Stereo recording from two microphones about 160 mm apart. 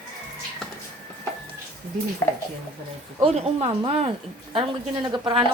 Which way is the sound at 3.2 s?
40° right (ahead or behind).